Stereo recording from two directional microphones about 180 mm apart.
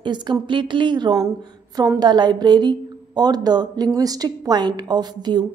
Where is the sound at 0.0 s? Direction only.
25° right (ahead or behind).